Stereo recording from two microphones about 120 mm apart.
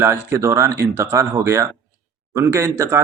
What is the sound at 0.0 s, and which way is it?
Speech, 20° right (ahead or behind).